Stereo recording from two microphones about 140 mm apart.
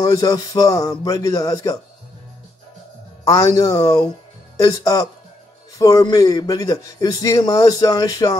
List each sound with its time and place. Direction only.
0.0 s a man's voice: 25° left (ahead or behind)
3.3 s a man's voice: 25° left (ahead or behind)